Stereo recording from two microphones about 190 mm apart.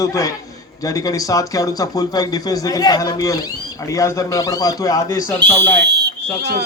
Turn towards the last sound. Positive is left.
turn(degrees=-60)  # may be behind; listen again after turning